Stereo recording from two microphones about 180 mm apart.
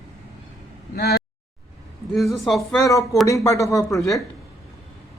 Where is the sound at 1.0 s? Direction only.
60° left (ahead or behind).